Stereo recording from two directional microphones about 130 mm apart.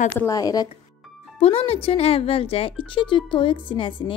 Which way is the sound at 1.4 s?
50° left (ahead or behind).